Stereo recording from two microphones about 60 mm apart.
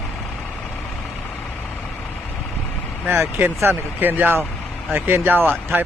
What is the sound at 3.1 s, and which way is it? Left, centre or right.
Speech, right.